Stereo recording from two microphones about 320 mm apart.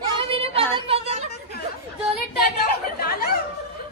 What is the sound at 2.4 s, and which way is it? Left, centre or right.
Chatter, left.